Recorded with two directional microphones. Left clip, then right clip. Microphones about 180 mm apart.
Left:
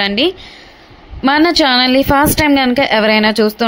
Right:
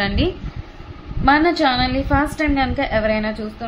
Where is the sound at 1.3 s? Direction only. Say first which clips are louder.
Left 4 dB; 45° left (ahead or behind).